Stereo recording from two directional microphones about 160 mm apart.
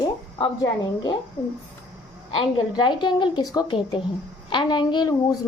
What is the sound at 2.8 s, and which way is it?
A woman's voice, 30° left (ahead or behind).